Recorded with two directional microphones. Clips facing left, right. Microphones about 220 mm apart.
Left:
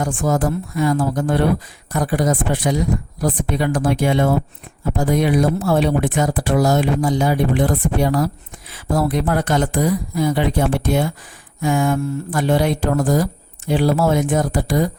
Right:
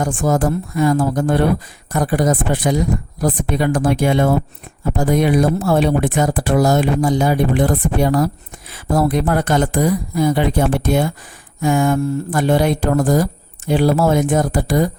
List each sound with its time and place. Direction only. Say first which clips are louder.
0.0 s speech: right 2 dB; 45° right (ahead or behind)